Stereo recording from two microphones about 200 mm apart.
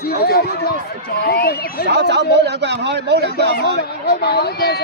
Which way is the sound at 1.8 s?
60° right (ahead or behind).